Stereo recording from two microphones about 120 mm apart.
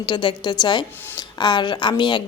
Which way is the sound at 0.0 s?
40° left (ahead or behind).